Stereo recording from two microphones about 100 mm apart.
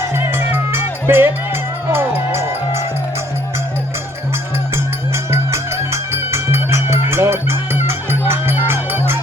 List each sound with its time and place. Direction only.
0.1 s music: 20° right (ahead or behind)
4.7 s music: 25° right (ahead or behind)